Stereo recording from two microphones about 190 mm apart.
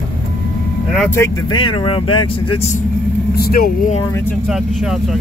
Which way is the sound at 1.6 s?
25° left (ahead or behind).